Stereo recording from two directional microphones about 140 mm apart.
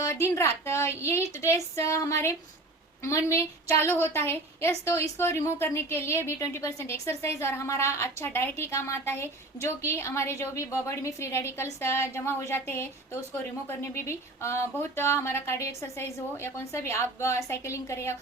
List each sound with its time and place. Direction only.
0.0 s a woman's voice: 20° left (ahead or behind)